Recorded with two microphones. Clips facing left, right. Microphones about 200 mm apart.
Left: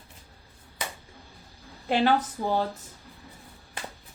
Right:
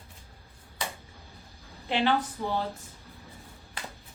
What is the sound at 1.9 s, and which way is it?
Speech, 40° left (ahead or behind).